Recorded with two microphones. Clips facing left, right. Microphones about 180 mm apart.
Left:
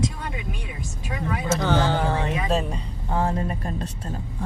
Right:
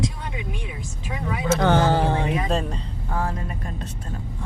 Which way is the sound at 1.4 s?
55° right (ahead or behind).